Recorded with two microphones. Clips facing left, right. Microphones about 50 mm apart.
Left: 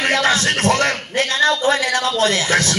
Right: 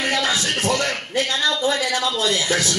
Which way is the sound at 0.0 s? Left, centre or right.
Left.